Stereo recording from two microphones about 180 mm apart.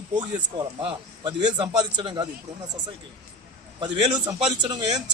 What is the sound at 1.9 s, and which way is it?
Speech, 25° right (ahead or behind).